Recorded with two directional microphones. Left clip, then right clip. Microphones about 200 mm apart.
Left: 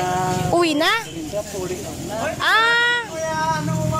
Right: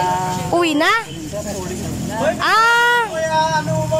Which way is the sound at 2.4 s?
10° right (ahead or behind).